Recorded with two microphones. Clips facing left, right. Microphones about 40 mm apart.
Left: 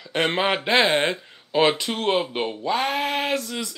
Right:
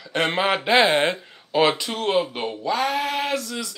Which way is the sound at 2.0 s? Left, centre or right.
Centre.